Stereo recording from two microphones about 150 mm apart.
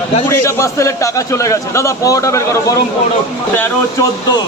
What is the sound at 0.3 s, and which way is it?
A man's voice, 20° left (ahead or behind).